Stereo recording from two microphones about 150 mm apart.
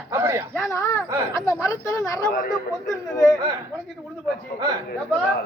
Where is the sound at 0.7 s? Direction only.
20° left (ahead or behind).